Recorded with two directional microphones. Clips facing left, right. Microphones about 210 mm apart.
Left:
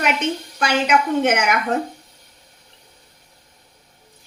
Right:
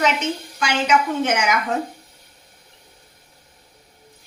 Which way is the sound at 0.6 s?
60° left (ahead or behind).